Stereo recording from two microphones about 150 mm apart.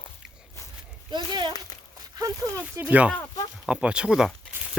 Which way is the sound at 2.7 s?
10° right (ahead or behind).